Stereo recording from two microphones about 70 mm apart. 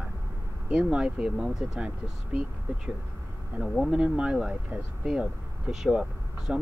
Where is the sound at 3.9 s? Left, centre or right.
Centre.